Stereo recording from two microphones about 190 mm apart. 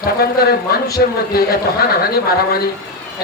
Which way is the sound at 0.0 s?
55° left (ahead or behind).